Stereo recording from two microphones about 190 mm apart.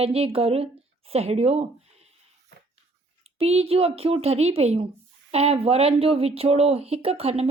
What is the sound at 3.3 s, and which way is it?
Speech, 30° right (ahead or behind).